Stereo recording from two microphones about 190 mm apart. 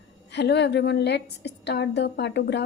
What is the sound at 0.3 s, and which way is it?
Speech, 65° left (ahead or behind).